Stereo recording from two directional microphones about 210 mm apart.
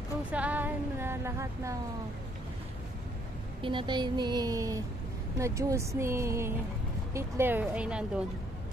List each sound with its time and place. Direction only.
0.3 s a woman's voice: 5° right (ahead or behind)
3.6 s speech: 20° right (ahead or behind); by 8.0 s 5° right (ahead or behind)